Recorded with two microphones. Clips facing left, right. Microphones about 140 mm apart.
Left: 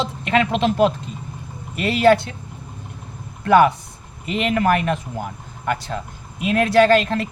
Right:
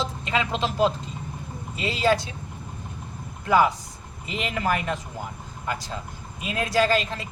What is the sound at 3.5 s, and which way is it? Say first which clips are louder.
Speech: left 6 dB; 65° left (ahead or behind).